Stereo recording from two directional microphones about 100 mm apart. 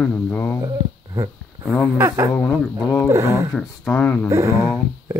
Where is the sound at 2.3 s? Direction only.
25° left (ahead or behind).